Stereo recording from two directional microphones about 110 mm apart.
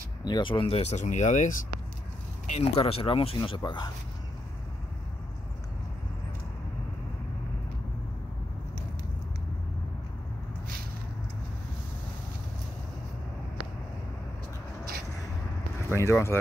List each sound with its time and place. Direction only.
0.2 s speech: 45° left (ahead or behind); by 1.4 s 90° left
2.4 s vehicle: 90° left
2.8 s speech: 55° left (ahead or behind)
15.9 s speech: 25° left (ahead or behind)